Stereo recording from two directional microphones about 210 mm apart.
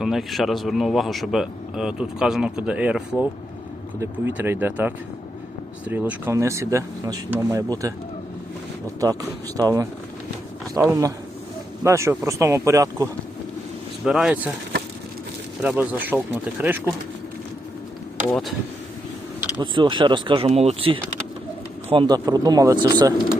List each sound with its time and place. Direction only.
0.0 s a man's voice: centre (ahead or behind)
4.4 s speech: 10° right (ahead or behind)
9.6 s speech: 15° right (ahead or behind)
14.0 s a man's voice: 5° right (ahead or behind)
15.6 s speech: 10° right (ahead or behind)
18.3 s a man's voice: centre (ahead or behind)
19.5 s speech: 20° right (ahead or behind)